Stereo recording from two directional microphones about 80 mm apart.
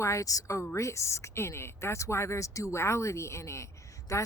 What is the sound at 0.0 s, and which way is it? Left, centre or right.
Speech, left.